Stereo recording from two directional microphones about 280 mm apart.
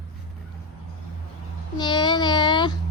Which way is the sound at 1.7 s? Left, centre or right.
Centre.